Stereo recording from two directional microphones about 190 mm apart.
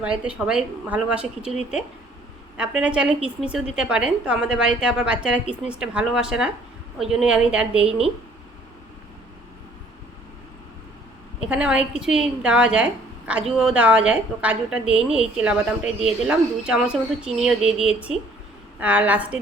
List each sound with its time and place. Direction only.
0.0 s a woman's voice: 5° right (ahead or behind)
2.6 s a woman's voice: 5° right (ahead or behind)
11.3 s a woman's voice: 5° right (ahead or behind)